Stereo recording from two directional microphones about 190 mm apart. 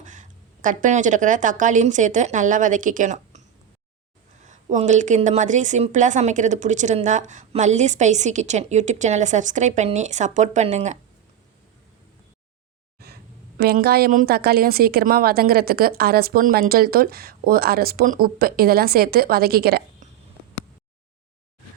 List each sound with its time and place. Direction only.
0.0 s speech: 40° right (ahead or behind)
4.4 s a woman's voice: 40° right (ahead or behind)
13.6 s a woman's voice: 55° right (ahead or behind)